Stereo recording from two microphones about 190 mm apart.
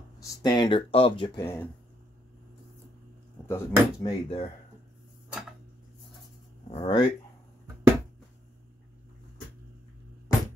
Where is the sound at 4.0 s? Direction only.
30° left (ahead or behind).